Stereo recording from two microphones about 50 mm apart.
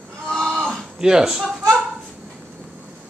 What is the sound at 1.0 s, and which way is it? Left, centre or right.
Speech, centre.